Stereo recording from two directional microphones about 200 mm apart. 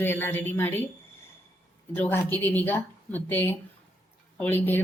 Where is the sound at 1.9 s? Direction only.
10° left (ahead or behind).